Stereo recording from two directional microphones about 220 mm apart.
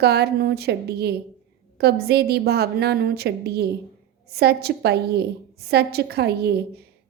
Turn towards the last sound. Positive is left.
turn(degrees=-45)  # may be behind; listen again after turning